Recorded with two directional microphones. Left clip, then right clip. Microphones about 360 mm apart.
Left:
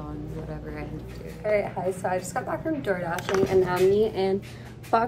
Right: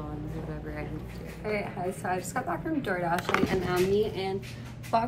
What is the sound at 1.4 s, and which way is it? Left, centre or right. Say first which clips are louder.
A woman's voice: left 7 dB; centre.